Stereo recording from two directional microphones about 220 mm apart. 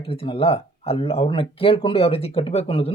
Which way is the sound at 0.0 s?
25° left (ahead or behind).